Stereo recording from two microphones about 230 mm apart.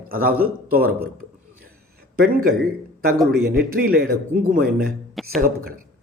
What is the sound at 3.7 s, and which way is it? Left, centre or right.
A man's voice, right.